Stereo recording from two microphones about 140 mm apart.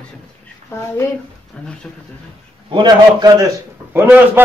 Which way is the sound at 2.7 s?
35° right (ahead or behind).